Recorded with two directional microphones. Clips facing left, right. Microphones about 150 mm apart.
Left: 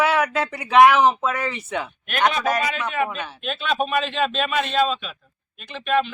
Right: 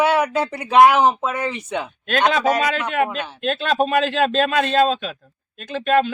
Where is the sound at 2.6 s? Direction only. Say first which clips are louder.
Right 4 dB; 90° right.